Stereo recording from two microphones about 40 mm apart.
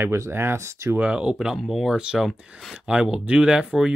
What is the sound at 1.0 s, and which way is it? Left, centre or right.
Speech, right.